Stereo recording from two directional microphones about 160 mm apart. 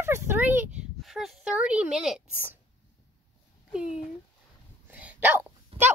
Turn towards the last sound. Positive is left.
turn(degrees=-35)  # may be behind; listen again after turning